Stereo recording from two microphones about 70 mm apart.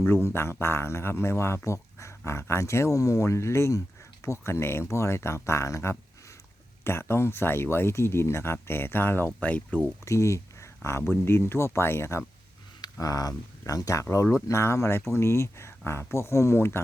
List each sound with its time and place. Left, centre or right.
0.1 s speech: left
10.1 s a sound: left
11.0 s speech: left
12.8 s speech: left